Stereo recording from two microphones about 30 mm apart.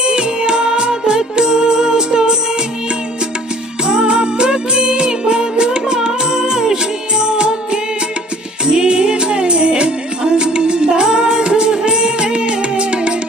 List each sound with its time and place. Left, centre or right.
0.0 s music: right
3.8 s music: right
7.2 s music of bollywood: right
8.6 s music: right